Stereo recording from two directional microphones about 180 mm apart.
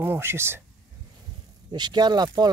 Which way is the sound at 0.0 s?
15° right (ahead or behind).